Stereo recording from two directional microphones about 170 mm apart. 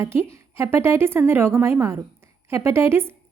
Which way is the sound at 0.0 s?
15° right (ahead or behind).